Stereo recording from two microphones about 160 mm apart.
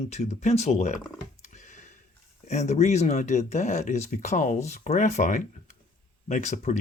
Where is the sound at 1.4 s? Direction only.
50° left (ahead or behind).